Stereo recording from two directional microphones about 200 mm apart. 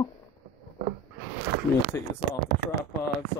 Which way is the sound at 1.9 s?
10° left (ahead or behind).